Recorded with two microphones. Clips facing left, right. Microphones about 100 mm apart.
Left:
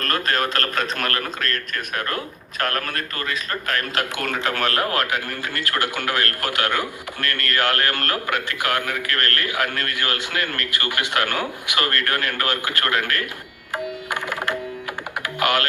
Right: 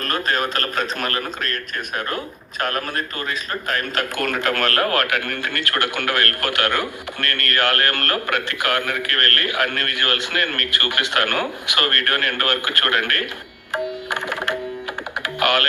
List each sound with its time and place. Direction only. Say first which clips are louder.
0.0 s a man's voice: even; 40° left (ahead or behind)
4.4 s speech: right 1 dB; 15° left (ahead or behind)
4.8 s a man's voice: right 2 dB; 55° right (ahead or behind)
14.1 s music: right 1 dB; 55° right (ahead or behind)